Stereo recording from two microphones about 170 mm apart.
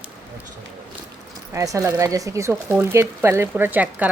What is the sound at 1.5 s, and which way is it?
Speech, 20° right (ahead or behind).